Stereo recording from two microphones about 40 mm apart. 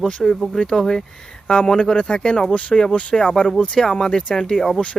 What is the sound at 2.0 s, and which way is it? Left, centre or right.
Speech, left.